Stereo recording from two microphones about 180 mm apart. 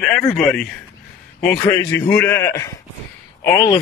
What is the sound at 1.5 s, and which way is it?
A man's voice, 10° left (ahead or behind).